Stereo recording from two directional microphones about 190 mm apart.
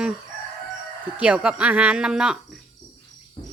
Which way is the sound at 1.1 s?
5° right (ahead or behind).